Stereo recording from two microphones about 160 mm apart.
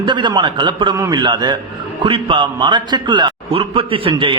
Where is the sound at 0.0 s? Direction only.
30° right (ahead or behind).